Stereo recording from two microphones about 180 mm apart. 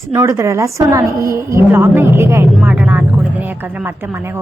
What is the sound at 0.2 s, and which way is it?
A woman's voice, 15° right (ahead or behind).